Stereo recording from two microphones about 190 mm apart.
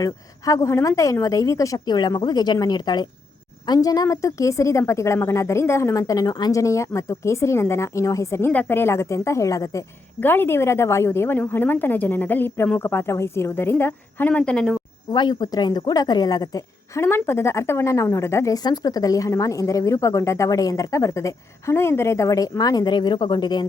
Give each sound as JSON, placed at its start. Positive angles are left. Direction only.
{"t": 0.0, "sound": "a woman's voice", "side_deg": 15}
{"t": 15.1, "sound": "a woman's voice", "side_deg": 20}